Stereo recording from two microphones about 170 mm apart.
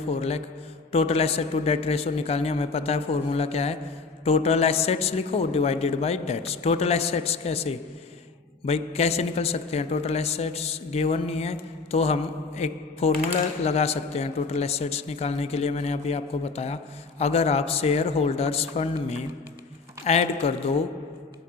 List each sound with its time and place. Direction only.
0.1 s a man's voice: 40° left (ahead or behind)